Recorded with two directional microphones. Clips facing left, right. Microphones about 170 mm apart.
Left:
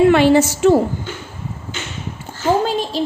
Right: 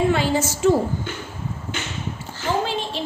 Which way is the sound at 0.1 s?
70° left (ahead or behind).